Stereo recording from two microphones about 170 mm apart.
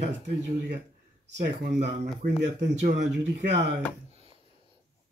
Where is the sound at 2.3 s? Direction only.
90° right.